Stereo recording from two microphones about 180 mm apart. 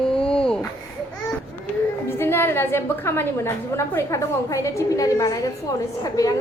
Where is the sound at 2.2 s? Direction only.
15° left (ahead or behind).